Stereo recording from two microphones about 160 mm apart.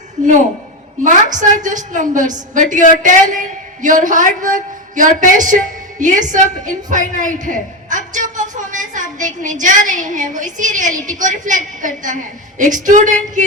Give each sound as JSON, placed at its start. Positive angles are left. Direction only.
{"t": 1.0, "sound": "a woman's voice", "side_deg": -50}